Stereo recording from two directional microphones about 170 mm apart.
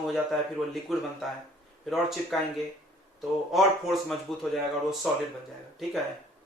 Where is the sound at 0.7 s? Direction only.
Centre (ahead or behind).